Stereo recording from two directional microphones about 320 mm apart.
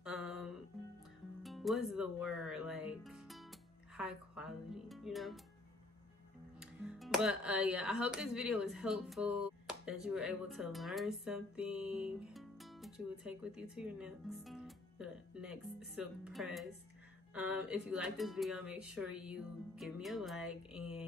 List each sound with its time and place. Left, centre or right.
0.0 s music: centre
1.4 s speech: centre
6.6 s speech: centre